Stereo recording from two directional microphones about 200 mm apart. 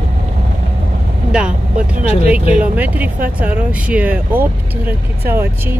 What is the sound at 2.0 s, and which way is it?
Speech, 30° left (ahead or behind).